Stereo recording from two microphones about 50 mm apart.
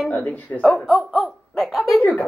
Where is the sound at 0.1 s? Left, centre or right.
Left.